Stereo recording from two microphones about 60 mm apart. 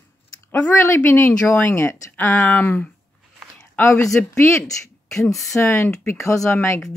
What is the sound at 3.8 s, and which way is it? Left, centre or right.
Speech, left.